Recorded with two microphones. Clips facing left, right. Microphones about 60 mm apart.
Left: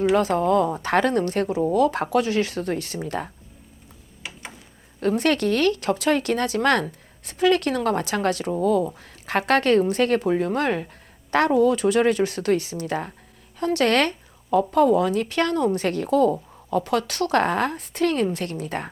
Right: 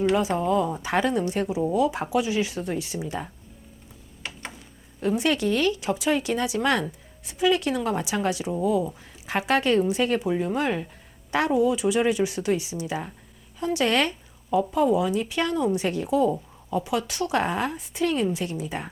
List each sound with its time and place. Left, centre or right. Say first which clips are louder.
0.3 s speech: left 4 dB; left
4.9 s speech: left 3 dB; left